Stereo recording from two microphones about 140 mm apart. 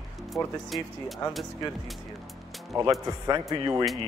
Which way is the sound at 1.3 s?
Centre (ahead or behind).